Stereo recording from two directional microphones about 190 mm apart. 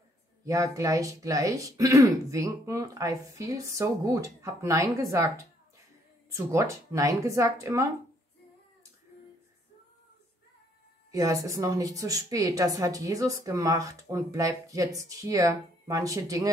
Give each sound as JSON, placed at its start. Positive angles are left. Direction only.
{"t": 0.5, "sound": "a woman's voice", "side_deg": -15}
{"t": 6.3, "sound": "a woman's voice", "side_deg": -15}
{"t": 11.1, "sound": "a woman's voice", "side_deg": -15}